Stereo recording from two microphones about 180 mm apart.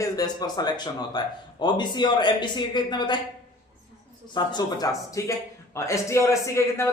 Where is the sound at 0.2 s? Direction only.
20° left (ahead or behind).